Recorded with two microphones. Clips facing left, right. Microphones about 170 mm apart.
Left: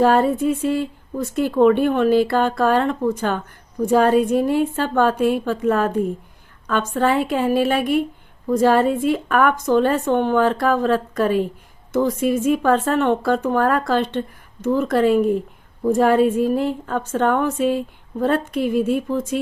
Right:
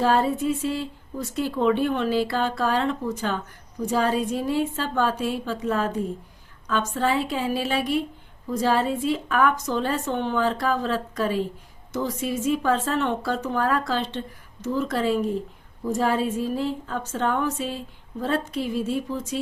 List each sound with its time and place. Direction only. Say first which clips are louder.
0.0 s speech: left 5 dB; 55° left (ahead or behind)